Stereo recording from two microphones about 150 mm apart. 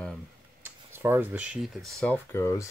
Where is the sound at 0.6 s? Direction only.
15° right (ahead or behind).